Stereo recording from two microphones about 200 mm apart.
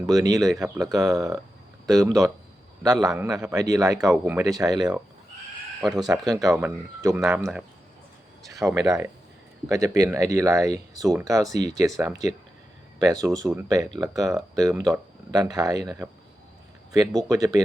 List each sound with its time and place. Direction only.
0.1 s speech: 15° right (ahead or behind)
5.8 s speech: centre (ahead or behind)
6.4 s speech: 10° right (ahead or behind)
8.5 s speech: 5° right (ahead or behind)
9.6 s speech: 15° right (ahead or behind)